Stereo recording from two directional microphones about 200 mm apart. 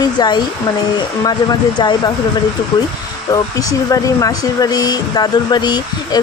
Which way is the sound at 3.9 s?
15° left (ahead or behind).